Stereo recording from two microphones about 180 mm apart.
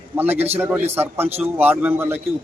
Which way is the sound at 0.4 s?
10° right (ahead or behind).